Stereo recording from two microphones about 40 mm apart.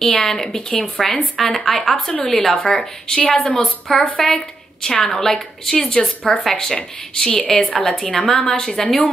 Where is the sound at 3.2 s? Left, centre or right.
Left.